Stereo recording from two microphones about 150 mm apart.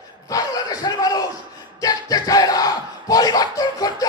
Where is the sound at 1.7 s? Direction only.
25° left (ahead or behind).